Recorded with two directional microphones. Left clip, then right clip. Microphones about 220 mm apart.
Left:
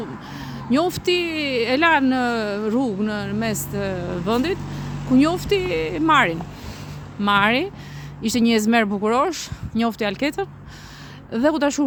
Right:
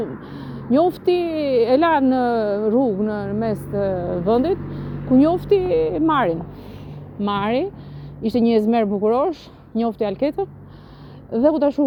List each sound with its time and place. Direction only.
0.3 s speech: 15° left (ahead or behind)